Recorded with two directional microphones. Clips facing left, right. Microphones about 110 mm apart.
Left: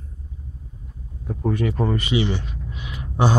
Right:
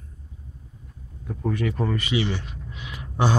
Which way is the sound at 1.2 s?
25° left (ahead or behind).